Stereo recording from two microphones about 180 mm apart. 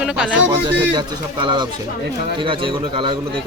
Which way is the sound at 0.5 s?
25° right (ahead or behind).